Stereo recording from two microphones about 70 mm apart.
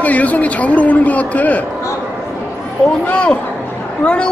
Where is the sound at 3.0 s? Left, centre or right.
Centre.